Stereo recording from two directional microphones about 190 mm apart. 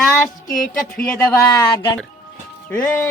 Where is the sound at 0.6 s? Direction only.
50° left (ahead or behind).